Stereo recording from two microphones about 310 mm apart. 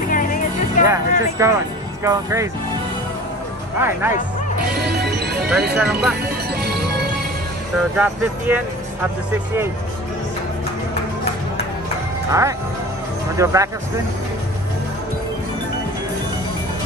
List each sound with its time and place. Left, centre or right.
0.1 s music: left
0.8 s speech: centre
3.7 s speech: centre
4.7 s music: right
5.8 s speech: centre
6.5 s music: right
8.0 s speech: centre
12.3 s speech: centre